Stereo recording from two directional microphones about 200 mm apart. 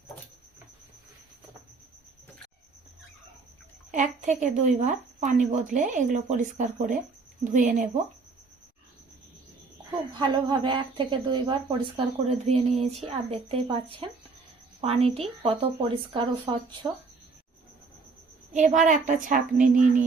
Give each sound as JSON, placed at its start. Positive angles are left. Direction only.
{"t": 3.9, "sound": "a woman's voice", "side_deg": -40}
{"t": 10.2, "sound": "a woman's voice", "side_deg": -25}
{"t": 18.5, "sound": "a woman's voice", "side_deg": -40}